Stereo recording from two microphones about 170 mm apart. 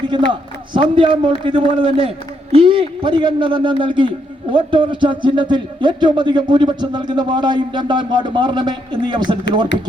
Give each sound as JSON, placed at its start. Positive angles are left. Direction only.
{"t": 0.3, "sound": "speech", "side_deg": -30}